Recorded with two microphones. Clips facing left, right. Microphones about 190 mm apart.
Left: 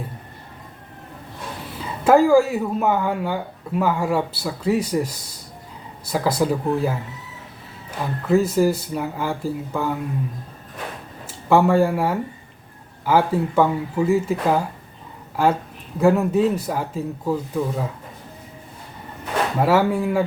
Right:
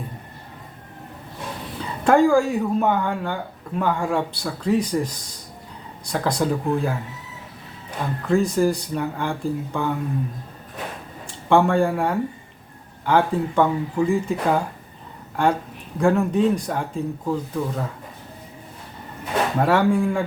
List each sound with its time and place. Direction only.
2.0 s speech: 5° left (ahead or behind)
11.3 s speech: 5° left (ahead or behind)
19.5 s speech: 5° left (ahead or behind)